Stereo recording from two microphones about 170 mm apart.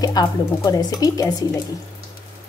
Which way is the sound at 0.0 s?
20° left (ahead or behind).